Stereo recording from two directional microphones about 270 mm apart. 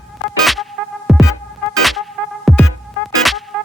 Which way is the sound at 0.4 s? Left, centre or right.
Centre.